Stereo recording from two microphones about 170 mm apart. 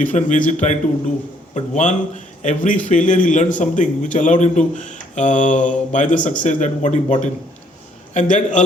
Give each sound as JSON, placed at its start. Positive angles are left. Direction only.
{"t": 0.0, "sound": "a man's voice", "side_deg": 45}